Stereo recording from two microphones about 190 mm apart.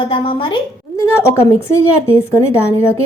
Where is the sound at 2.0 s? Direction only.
15° left (ahead or behind).